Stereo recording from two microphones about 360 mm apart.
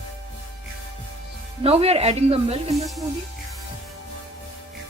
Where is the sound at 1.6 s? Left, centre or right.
Centre.